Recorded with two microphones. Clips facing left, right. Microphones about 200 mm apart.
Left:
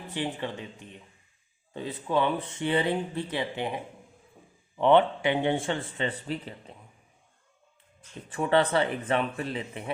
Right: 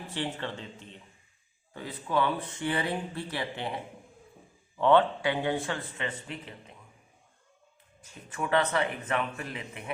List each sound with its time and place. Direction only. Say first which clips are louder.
0.1 s speech: left 3 dB; 15° left (ahead or behind)
4.8 s speech: left 2 dB; 20° left (ahead or behind); by 6.7 s 35° left (ahead or behind)
8.3 s speech: left 4 dB; 30° left (ahead or behind)